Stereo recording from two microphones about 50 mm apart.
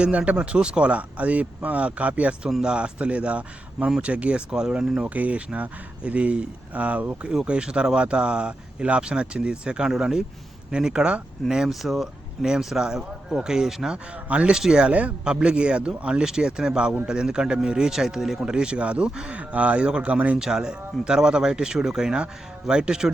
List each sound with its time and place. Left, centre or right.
0.0 s speech: right
2.5 s speech: centre
5.0 s speech: right; by 13.9 s centre
13.9 s speech: right
20.4 s speech: centre